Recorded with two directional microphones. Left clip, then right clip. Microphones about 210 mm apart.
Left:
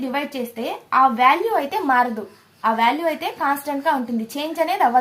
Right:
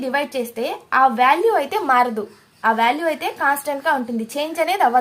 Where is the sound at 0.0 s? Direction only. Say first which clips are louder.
Right 3 dB; 45° right (ahead or behind).